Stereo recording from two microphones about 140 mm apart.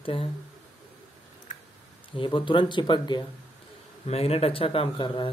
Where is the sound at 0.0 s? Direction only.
40° left (ahead or behind).